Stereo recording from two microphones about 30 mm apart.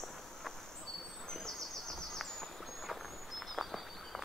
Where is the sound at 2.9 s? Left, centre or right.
Centre.